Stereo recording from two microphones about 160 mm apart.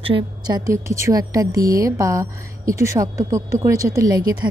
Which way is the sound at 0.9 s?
20° right (ahead or behind).